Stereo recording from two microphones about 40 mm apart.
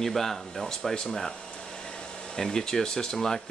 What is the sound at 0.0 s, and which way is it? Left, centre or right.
Speech, centre.